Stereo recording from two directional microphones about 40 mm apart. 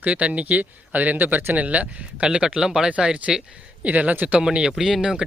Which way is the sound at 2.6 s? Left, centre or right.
Centre.